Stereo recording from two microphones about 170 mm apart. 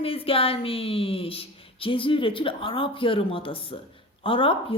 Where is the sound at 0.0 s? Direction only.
35° left (ahead or behind).